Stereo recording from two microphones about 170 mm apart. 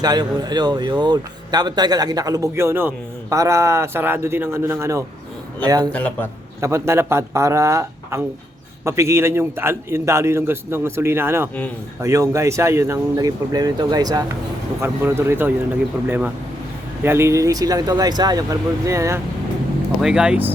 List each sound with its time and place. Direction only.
0.0 s speech: 25° right (ahead or behind)
5.9 s a man's voice: 10° left (ahead or behind)
6.6 s a man's voice: 15° right (ahead or behind)
20.0 s speech: 5° right (ahead or behind)